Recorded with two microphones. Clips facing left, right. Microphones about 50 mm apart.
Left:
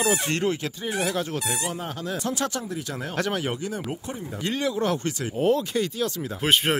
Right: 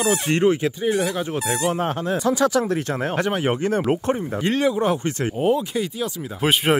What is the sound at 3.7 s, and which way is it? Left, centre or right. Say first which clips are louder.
Speech: right 11 dB; right.